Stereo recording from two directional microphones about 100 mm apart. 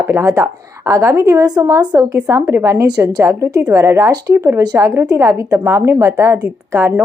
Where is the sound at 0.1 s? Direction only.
30° right (ahead or behind).